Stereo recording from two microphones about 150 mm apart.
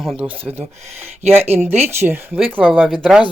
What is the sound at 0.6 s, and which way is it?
Speech, 45° right (ahead or behind).